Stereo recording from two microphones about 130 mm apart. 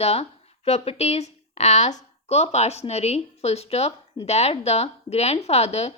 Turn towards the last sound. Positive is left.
turn(degrees=55)  # may be behind; listen again after turning